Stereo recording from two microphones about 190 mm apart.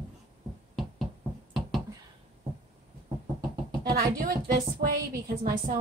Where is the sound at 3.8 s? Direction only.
50° right (ahead or behind).